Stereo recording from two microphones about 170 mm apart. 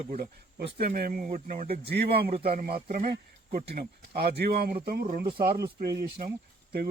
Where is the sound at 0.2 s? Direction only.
65° right (ahead or behind).